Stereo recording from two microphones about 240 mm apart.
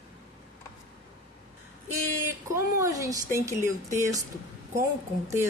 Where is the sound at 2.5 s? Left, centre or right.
Centre.